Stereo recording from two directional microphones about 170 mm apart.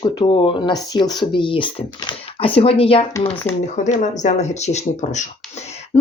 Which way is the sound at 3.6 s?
45° left (ahead or behind).